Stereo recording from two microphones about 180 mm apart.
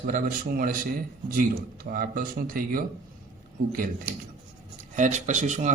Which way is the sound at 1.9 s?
55° right (ahead or behind).